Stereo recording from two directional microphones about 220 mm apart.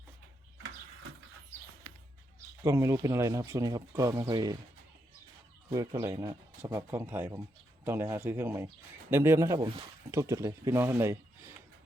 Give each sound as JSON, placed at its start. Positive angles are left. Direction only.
{"t": 2.6, "sound": "a man's voice", "side_deg": -15}
{"t": 5.7, "sound": "a man's voice", "side_deg": -15}